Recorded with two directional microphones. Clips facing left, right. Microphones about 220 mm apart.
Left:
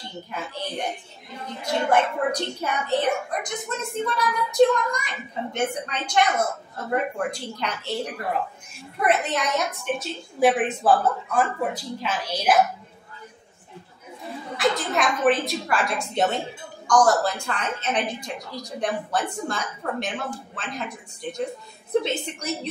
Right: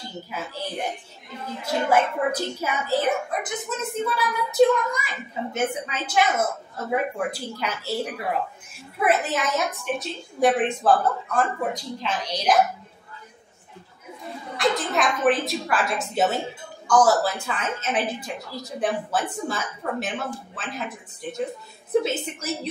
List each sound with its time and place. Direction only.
0.3 s a woman's voice: 5° right (ahead or behind)
14.6 s a woman's voice: centre (ahead or behind)